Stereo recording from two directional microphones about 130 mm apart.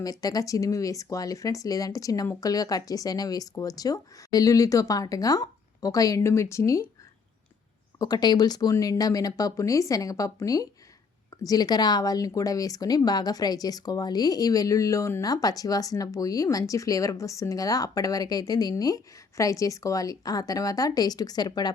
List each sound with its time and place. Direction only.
0.0 s speech: 30° left (ahead or behind)
7.9 s speech: 30° left (ahead or behind)